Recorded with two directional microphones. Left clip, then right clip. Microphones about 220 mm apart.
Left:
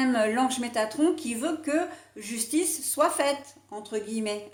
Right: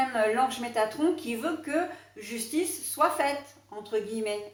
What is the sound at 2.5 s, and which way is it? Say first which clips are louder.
A woman's voice: left 1 dB; 45° left (ahead or behind).